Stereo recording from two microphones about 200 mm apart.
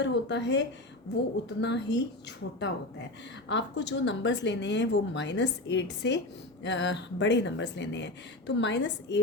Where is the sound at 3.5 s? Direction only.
60° left (ahead or behind).